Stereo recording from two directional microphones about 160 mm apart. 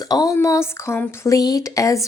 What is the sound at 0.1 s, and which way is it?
A woman's voice, 20° left (ahead or behind).